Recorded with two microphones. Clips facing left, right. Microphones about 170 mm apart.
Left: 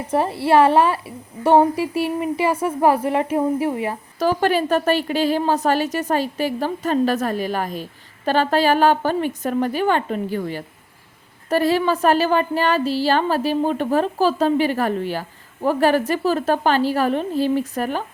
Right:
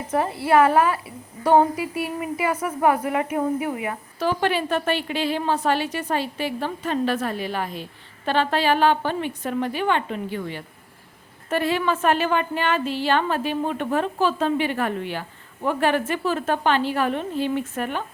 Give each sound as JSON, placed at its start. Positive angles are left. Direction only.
{"t": 0.1, "sound": "a woman's voice", "side_deg": 30}